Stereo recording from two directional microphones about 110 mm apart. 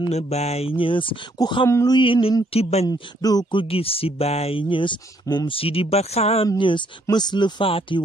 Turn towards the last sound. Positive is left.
turn(degrees=50)  # may be behind; listen again after turning